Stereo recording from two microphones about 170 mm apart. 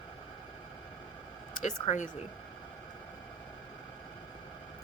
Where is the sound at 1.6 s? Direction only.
45° left (ahead or behind).